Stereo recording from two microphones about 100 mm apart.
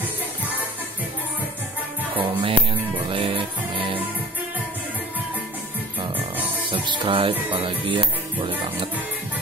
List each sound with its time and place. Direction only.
2.1 s music: 60° right (ahead or behind)
6.7 s music: 55° right (ahead or behind)